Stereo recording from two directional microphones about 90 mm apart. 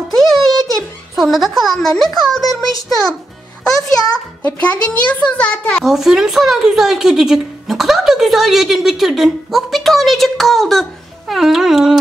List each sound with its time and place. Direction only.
0.1 s a sound: 5° left (ahead or behind)
3.6 s a child's voice: 5° left (ahead or behind)
4.6 s a child's voice: 15° left (ahead or behind)
5.8 s speech: centre (ahead or behind)